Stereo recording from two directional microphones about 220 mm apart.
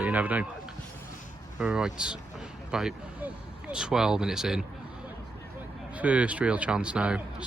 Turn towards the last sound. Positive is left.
turn(degrees=-5)  # may be behind; listen again after turning